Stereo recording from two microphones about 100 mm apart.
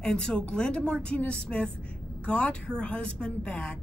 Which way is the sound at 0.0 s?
5° left (ahead or behind).